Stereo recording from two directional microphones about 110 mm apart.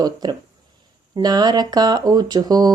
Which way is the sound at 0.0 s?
40° right (ahead or behind).